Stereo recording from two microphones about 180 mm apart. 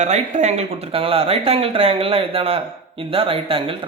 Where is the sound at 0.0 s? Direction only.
40° right (ahead or behind).